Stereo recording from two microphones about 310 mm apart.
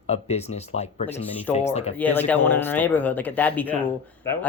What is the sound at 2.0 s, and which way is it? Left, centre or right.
Speech, centre.